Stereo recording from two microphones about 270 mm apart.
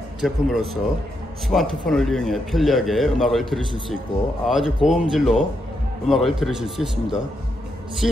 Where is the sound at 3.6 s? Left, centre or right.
Centre.